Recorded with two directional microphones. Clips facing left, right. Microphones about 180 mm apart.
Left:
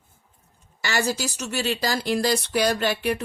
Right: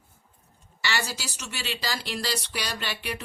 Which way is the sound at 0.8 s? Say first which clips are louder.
Left 6 dB; 45° left (ahead or behind).